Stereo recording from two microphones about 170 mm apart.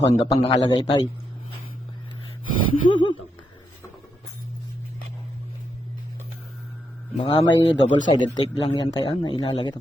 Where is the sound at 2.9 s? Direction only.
30° left (ahead or behind).